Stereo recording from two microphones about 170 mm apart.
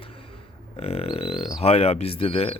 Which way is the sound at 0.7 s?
35° left (ahead or behind).